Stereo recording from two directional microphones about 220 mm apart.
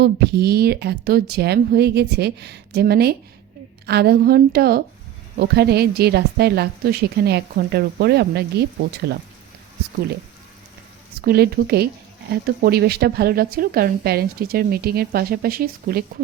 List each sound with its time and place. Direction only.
0.0 s speech: 45° right (ahead or behind)
11.2 s speech: 45° right (ahead or behind)